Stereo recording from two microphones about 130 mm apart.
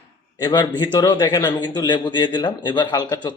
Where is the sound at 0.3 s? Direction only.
35° left (ahead or behind).